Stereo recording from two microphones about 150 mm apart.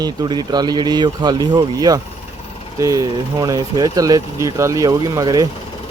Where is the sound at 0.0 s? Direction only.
25° right (ahead or behind).